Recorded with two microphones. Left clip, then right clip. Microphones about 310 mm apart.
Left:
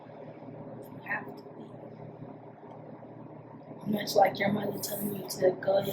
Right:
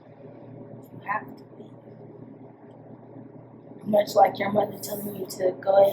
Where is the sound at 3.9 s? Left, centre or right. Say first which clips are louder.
Right 6 dB; centre.